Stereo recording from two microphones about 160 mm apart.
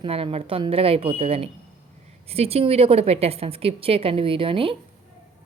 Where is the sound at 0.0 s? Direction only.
35° right (ahead or behind).